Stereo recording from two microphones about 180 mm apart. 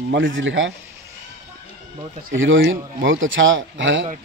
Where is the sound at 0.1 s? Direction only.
90° right.